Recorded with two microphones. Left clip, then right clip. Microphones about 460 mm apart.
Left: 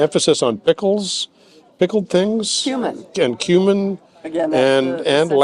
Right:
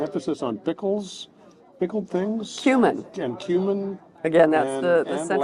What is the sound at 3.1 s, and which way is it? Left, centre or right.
Speech, left.